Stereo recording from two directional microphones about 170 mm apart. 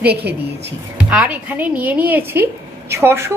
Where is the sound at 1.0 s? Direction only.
5° right (ahead or behind).